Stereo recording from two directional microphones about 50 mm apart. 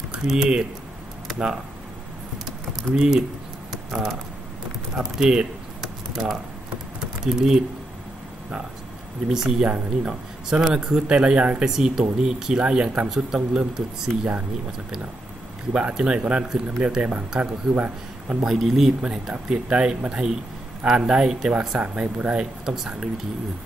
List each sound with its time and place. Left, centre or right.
0.1 s speech: centre
2.3 s typing: centre
4.9 s speech: centre
5.8 s a sound: centre
7.2 s speech: centre
9.3 s speech: centre
15.7 s speech: centre
17.7 s a man's voice: right
18.4 s speech: centre
18.9 s speech: centre
21.5 s speech: right
22.4 s speech: centre